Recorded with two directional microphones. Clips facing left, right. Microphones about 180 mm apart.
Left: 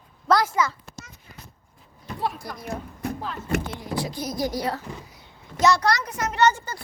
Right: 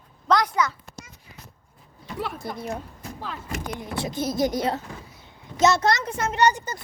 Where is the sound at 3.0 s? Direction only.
65° left (ahead or behind).